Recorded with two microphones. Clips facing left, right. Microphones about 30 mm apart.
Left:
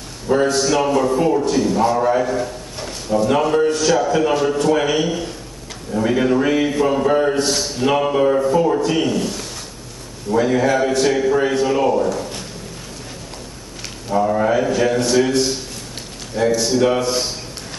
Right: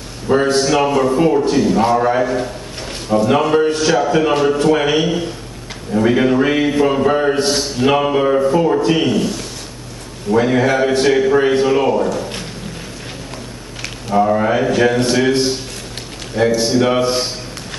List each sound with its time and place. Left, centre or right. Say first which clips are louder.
0.3 s a man's voice: right 2 dB; right
0.7 s a man's voice: right 2 dB; centre
10.3 s a man's voice: right 2 dB; right
14.1 s a man's voice: right 2 dB; centre